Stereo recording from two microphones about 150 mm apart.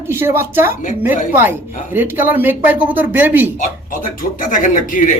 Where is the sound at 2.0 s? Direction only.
15° right (ahead or behind).